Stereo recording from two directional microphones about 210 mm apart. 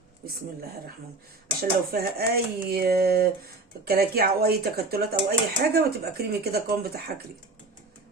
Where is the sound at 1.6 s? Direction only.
45° right (ahead or behind).